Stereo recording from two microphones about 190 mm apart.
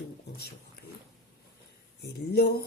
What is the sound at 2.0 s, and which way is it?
Speech, 60° left (ahead or behind).